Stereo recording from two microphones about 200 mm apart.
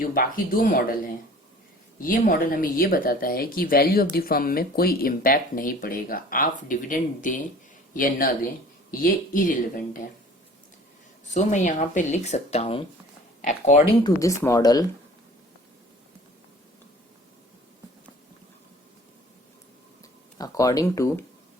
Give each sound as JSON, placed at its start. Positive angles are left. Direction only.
{"t": 0.0, "sound": "speech", "side_deg": 45}
{"t": 11.3, "sound": "a woman's voice", "side_deg": 40}
{"t": 14.0, "sound": "speech", "side_deg": 15}
{"t": 20.4, "sound": "speech", "side_deg": 20}